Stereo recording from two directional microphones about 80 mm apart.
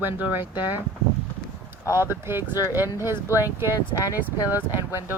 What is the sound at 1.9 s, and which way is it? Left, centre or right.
Speech, right.